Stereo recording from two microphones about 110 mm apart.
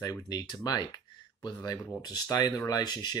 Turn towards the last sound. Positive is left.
turn(degrees=40)  # may be behind; listen again after turning